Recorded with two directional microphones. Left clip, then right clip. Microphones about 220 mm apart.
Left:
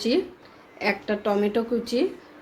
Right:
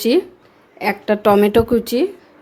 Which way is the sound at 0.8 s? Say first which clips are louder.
Right 7 dB; 45° right (ahead or behind).